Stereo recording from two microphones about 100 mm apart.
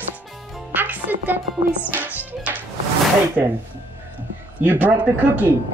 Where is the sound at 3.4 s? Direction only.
15° right (ahead or behind).